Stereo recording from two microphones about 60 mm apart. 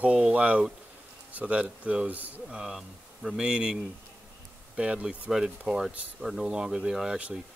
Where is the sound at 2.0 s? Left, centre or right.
Right.